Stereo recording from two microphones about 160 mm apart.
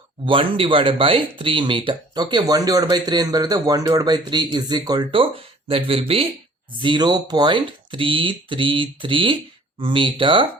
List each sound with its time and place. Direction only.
0.3 s speech: 35° right (ahead or behind)